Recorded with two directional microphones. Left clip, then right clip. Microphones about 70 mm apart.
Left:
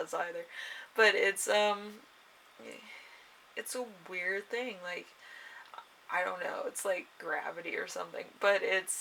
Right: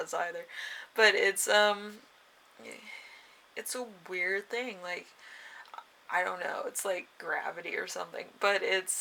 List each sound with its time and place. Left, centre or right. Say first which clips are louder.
0.0 s speech: right 2 dB; right
3.5 s speech: even; right
5.7 s a sound: right 4 dB; right
6.1 s speech: right 2 dB; right